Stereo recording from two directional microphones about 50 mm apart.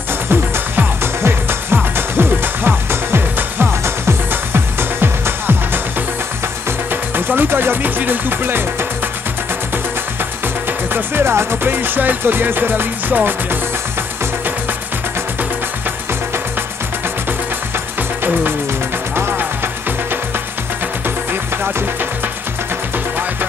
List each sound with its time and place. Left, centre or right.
0.3 s music: right
6.9 s music: right
10.9 s music: right
19.1 s music: right
21.3 s music: right